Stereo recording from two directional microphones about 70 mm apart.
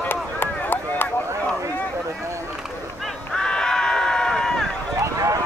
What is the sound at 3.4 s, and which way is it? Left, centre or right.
Run, centre.